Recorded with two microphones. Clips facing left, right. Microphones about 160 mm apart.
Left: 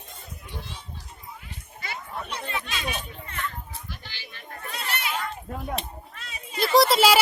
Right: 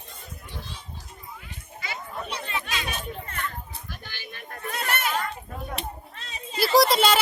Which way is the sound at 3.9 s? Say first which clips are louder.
Right 2 dB; 50° right (ahead or behind).